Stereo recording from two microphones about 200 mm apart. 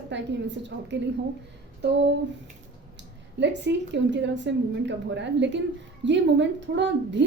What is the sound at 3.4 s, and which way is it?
A woman's voice, 60° right (ahead or behind).